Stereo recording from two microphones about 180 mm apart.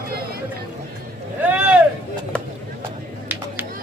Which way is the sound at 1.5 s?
5° right (ahead or behind).